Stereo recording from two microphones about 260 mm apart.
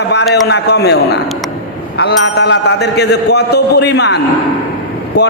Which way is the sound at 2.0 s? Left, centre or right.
Left.